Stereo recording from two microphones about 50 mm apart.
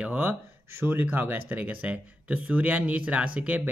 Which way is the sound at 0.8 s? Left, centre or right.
Right.